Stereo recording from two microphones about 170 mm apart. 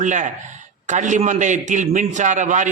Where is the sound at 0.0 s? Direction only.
45° right (ahead or behind).